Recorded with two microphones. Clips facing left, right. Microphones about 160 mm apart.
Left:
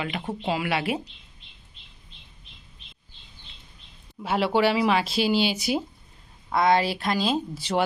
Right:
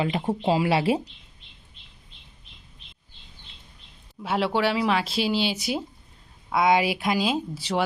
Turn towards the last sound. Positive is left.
turn(degrees=-5)  # may be behind; listen again after turning